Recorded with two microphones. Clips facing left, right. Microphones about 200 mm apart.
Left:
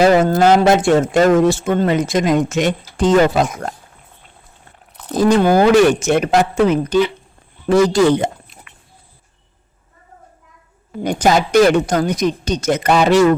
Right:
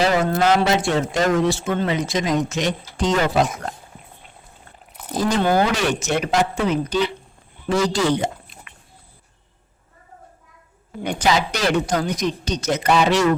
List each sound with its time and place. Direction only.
0.0 s speech: 50° left (ahead or behind)
5.2 s speech: 45° left (ahead or behind)
11.0 s speech: 45° left (ahead or behind)